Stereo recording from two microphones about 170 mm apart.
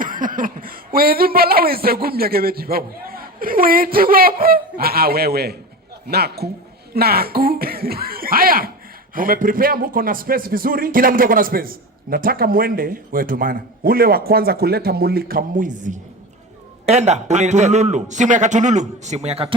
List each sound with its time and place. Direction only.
0.0 s a man's voice: 55° right (ahead or behind); by 19.5 s 35° right (ahead or behind)